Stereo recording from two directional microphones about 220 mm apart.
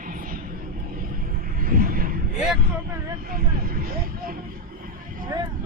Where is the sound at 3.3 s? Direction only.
40° right (ahead or behind).